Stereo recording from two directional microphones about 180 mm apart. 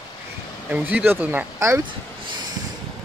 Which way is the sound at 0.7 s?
10° right (ahead or behind).